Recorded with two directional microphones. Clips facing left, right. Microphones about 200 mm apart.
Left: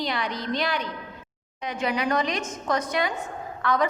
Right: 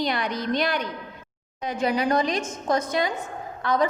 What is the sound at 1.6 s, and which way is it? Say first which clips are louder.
A woman's voice: right 3 dB; 35° right (ahead or behind).